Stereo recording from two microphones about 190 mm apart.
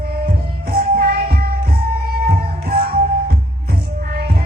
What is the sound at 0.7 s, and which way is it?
Music, 50° right (ahead or behind).